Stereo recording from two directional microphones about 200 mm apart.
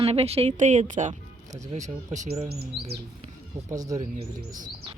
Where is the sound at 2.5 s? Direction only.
50° right (ahead or behind).